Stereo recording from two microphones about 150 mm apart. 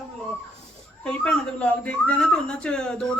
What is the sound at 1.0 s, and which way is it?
A man's voice, 5° left (ahead or behind).